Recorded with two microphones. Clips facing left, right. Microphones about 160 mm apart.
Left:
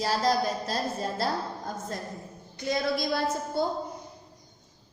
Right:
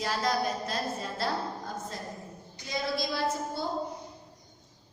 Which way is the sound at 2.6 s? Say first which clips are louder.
Left 5 dB; 55° left (ahead or behind).